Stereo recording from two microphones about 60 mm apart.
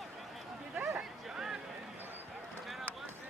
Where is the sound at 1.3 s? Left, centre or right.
Centre.